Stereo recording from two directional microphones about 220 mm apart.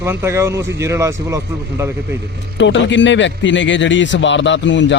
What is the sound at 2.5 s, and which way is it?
A man's voice, 55° left (ahead or behind).